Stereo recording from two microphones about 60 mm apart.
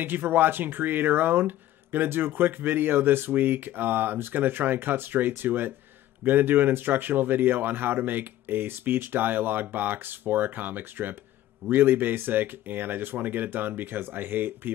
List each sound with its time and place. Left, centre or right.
0.0 s speech: right